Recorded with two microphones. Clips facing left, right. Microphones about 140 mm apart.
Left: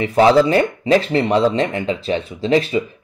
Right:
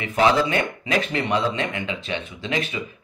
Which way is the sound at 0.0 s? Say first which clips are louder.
Left 7 dB; 35° left (ahead or behind).